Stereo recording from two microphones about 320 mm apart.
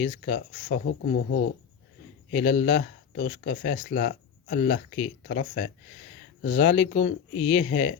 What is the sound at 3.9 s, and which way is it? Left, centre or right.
Speech, left.